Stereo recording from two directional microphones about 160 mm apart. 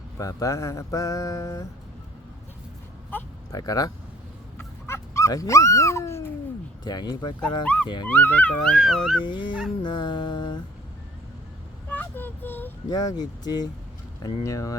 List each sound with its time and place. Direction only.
0.2 s mantra: 20° left (ahead or behind)
3.1 s a sound: 10° left (ahead or behind)
3.6 s mantra: 25° left (ahead or behind)
4.5 s dog: 15° left (ahead or behind)
6.8 s mantra: 25° left (ahead or behind)
7.6 s speech: 10° left (ahead or behind)
9.2 s mantra: 30° left (ahead or behind)
11.9 s vehicle: 10° left (ahead or behind)
12.9 s mantra: 25° left (ahead or behind)